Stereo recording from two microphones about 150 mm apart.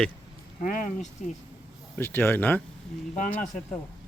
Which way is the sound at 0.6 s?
55° left (ahead or behind).